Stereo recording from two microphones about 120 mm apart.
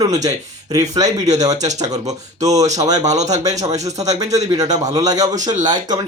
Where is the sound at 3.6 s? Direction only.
30° right (ahead or behind).